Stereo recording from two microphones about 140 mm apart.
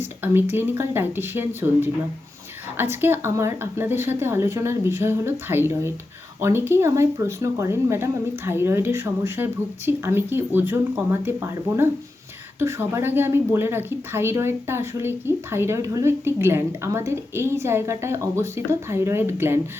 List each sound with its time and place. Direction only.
0.0 s a woman's voice: 15° right (ahead or behind)
2.9 s a woman's voice: 15° right (ahead or behind)